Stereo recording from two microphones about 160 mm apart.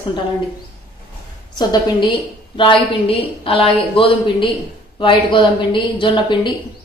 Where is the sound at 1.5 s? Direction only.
25° left (ahead or behind).